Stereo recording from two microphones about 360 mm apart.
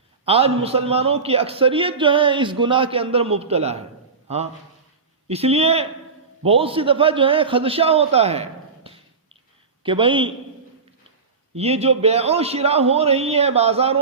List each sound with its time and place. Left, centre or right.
0.3 s a man's voice: centre
5.3 s a man's voice: centre
11.5 s a man's voice: centre